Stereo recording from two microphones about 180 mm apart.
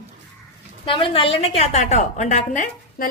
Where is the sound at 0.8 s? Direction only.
30° left (ahead or behind).